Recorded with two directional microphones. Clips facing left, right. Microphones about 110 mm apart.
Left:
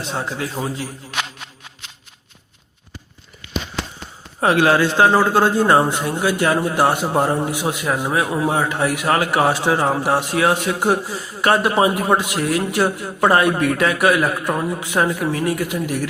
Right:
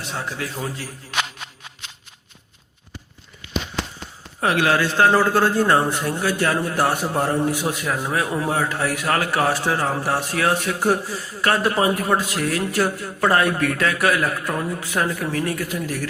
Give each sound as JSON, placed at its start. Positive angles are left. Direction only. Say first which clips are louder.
{"t": 0.0, "sound": "a man's voice", "louder": "left 4 dB", "side_deg": 25}
{"t": 4.4, "sound": "a man's voice", "louder": "left 4 dB", "side_deg": 30}